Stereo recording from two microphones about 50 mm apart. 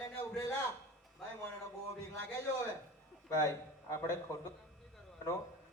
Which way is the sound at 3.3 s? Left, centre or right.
Left.